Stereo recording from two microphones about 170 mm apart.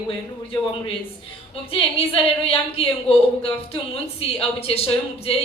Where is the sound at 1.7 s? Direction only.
35° left (ahead or behind).